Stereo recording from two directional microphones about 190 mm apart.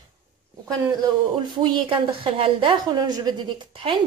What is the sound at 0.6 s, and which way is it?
A woman's voice, 20° right (ahead or behind).